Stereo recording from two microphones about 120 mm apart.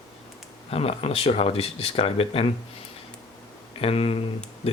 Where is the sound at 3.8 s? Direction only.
55° left (ahead or behind).